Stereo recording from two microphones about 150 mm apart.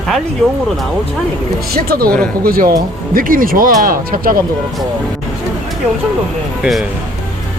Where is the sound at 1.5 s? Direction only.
90° right.